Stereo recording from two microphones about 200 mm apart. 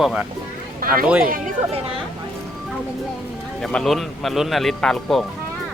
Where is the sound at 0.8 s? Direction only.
45° right (ahead or behind).